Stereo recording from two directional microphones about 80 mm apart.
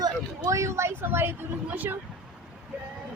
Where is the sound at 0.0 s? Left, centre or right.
Right.